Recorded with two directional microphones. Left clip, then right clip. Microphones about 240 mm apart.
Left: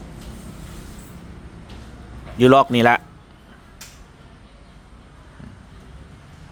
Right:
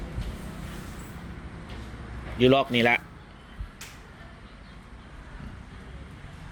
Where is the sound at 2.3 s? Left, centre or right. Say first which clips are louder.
Left 8 dB; left.